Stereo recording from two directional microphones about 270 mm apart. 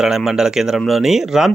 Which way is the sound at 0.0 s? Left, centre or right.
Centre.